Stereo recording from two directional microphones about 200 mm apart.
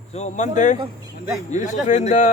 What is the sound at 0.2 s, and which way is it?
A man's voice, 35° left (ahead or behind).